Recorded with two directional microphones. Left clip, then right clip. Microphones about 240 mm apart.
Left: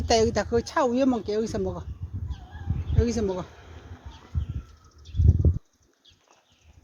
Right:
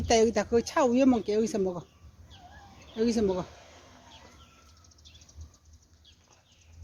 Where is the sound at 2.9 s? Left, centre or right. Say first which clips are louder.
Even; centre.